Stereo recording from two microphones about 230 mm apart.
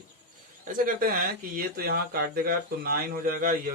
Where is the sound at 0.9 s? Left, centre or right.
Right.